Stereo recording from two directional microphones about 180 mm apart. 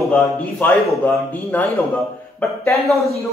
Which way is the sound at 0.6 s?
5° left (ahead or behind).